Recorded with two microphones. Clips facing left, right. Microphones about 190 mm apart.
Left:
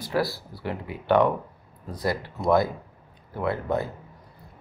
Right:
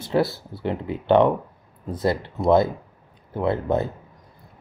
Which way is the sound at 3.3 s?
25° right (ahead or behind).